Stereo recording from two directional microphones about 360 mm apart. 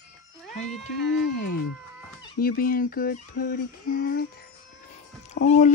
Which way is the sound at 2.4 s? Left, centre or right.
Left.